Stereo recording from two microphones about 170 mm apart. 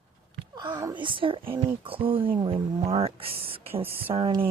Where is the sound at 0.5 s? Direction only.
25° right (ahead or behind).